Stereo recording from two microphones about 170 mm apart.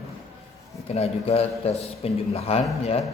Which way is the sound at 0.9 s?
35° left (ahead or behind).